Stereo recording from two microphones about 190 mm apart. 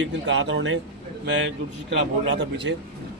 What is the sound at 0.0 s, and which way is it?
Speech, 70° right (ahead or behind).